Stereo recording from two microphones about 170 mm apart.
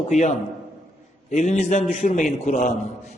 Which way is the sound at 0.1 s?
45° left (ahead or behind).